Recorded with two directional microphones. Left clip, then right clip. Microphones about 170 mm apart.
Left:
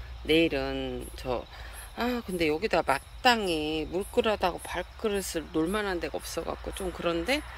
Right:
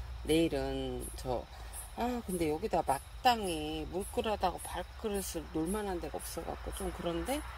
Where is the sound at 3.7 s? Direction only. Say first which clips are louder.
Left 7 dB; 15° left (ahead or behind).